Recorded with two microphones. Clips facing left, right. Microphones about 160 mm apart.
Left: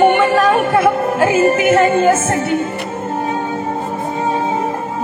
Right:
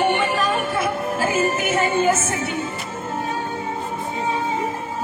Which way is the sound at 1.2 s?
60° left (ahead or behind).